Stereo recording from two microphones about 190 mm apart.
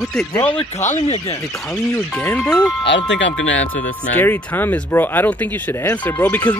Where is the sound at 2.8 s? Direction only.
70° left (ahead or behind); by 3.9 s 90° left.